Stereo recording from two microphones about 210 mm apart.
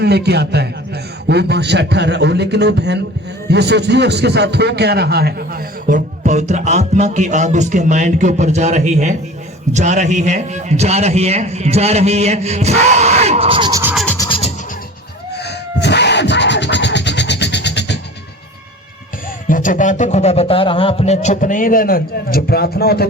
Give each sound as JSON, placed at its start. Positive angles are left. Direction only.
{"t": 0.0, "sound": "a man's voice", "side_deg": -50}
{"t": 13.9, "sound": "music", "side_deg": 5}
{"t": 14.2, "sound": "music", "side_deg": 25}
{"t": 15.4, "sound": "scratching", "side_deg": 55}
{"t": 19.5, "sound": "speech", "side_deg": 40}